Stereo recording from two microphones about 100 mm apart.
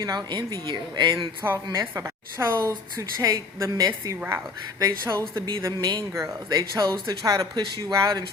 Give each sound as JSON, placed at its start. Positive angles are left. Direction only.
{"t": 0.0, "sound": "speech", "side_deg": -45}
{"t": 1.7, "sound": "a woman's voice", "side_deg": -30}
{"t": 4.2, "sound": "a woman's voice", "side_deg": -20}